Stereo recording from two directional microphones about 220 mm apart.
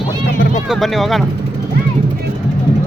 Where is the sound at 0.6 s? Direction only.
Centre (ahead or behind).